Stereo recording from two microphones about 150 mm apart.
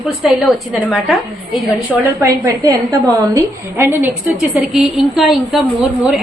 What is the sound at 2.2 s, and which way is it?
A woman's voice, 20° right (ahead or behind).